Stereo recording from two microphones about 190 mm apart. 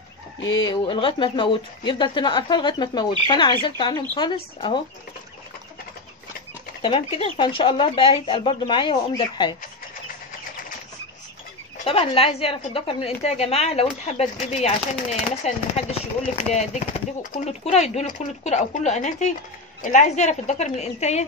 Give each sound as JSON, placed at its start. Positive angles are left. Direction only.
{"t": 0.6, "sound": "speech", "side_deg": 25}
{"t": 6.8, "sound": "speech", "side_deg": 30}
{"t": 11.8, "sound": "a woman's voice", "side_deg": 30}